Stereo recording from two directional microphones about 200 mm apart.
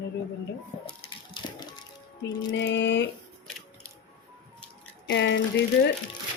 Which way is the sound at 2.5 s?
60° left (ahead or behind).